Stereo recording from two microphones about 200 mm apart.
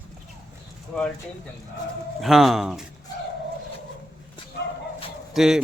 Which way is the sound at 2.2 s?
Centre (ahead or behind).